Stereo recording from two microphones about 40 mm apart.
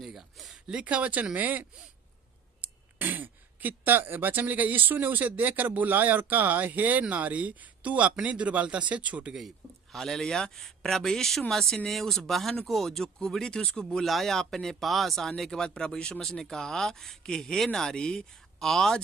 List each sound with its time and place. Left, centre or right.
0.0 s a sound: centre
0.7 s speech: right
3.0 s speech: right
9.9 s speech: centre
14.0 s speech: centre
15.5 s speech: centre